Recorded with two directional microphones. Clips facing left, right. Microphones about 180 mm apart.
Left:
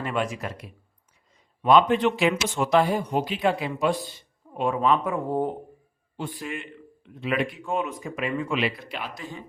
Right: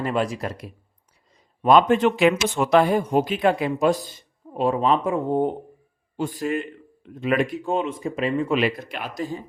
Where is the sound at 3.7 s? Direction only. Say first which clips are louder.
Right 4 dB; 40° right (ahead or behind); by 5.5 s 25° right (ahead or behind).